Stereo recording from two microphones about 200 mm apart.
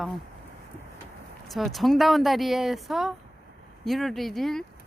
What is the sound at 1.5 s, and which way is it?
Speech, centre (ahead or behind).